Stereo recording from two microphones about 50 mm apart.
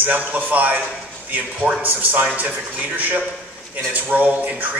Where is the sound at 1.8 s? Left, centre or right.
Right.